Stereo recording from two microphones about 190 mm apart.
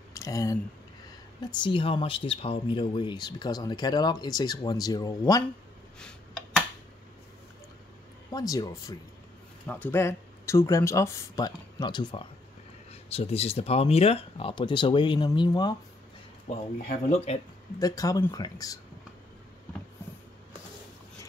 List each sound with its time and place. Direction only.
0.1 s speech: 15° left (ahead or behind)
5.9 s tick: 5° left (ahead or behind)
8.3 s speech: 20° left (ahead or behind)
17.1 s speech: 35° left (ahead or behind)
17.7 s speech: 20° left (ahead or behind)